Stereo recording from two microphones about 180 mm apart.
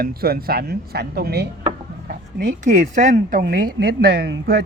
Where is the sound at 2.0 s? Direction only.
50° right (ahead or behind).